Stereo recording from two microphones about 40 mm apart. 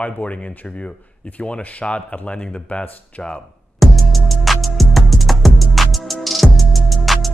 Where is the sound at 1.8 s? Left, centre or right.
Centre.